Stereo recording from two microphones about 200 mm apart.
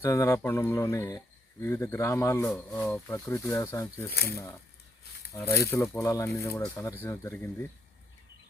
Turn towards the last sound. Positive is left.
turn(degrees=15)  # may be behind; listen again after turning